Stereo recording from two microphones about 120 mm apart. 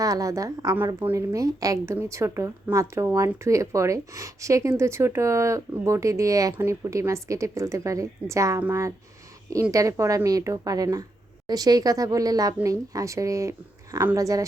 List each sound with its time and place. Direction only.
0.0 s speech: 30° right (ahead or behind)